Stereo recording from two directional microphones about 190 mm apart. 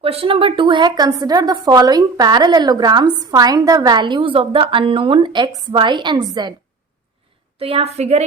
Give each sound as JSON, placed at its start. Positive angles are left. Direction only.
{"t": 0.0, "sound": "a woman's voice", "side_deg": -30}
{"t": 7.6, "sound": "a woman's voice", "side_deg": -30}